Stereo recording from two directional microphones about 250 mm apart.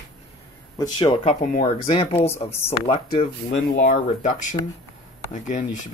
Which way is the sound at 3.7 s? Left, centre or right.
Left.